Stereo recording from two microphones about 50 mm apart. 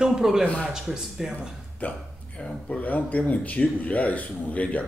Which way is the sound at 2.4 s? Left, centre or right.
Centre.